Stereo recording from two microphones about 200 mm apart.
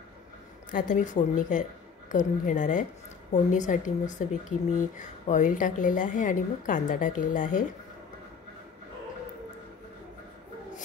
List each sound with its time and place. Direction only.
0.7 s speech: 40° left (ahead or behind)